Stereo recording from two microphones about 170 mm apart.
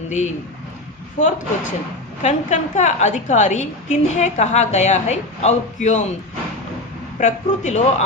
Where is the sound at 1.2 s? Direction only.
50° left (ahead or behind).